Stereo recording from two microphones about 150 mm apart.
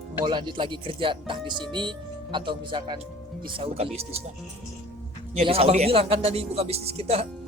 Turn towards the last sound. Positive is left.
turn(degrees=-40)  # may be behind; listen again after turning